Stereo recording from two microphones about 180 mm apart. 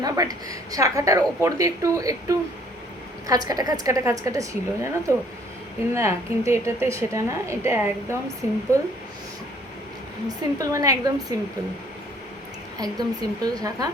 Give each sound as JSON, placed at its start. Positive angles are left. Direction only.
{"t": 0.0, "sound": "a woman's voice", "side_deg": -20}
{"t": 10.2, "sound": "a woman's voice", "side_deg": -20}
{"t": 12.8, "sound": "a woman's voice", "side_deg": -20}